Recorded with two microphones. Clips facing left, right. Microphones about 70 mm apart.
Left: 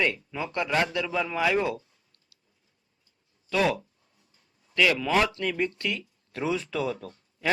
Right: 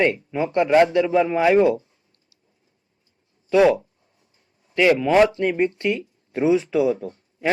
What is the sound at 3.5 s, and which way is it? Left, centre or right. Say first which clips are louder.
A man's voice: right 9 dB; right.